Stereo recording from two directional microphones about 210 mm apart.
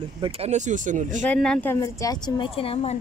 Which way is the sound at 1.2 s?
5° left (ahead or behind).